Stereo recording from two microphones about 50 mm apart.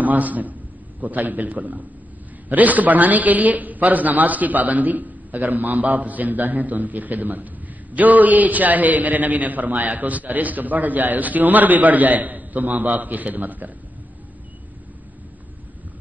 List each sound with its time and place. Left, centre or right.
0.0 s a man's voice: right